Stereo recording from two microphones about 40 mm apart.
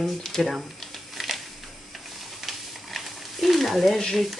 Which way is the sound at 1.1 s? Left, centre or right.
Centre.